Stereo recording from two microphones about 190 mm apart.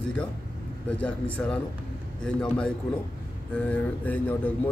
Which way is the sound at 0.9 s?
5° left (ahead or behind).